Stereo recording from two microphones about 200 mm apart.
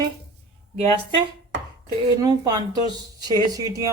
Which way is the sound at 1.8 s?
15° right (ahead or behind).